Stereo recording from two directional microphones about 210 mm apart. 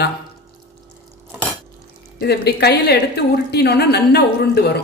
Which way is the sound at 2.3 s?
50° left (ahead or behind).